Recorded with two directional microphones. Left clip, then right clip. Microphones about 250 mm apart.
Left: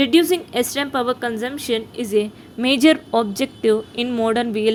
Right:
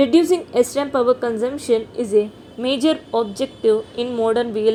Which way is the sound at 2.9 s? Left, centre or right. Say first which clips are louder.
Left 4 dB; left.